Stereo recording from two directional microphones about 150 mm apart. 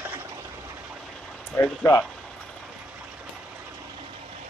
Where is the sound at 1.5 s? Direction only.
15° left (ahead or behind).